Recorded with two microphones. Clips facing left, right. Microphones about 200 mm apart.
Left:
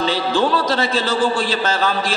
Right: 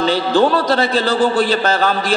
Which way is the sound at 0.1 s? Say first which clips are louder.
Right 4 dB; 55° right (ahead or behind).